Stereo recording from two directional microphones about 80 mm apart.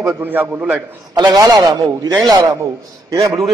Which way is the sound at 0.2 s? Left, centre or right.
Right.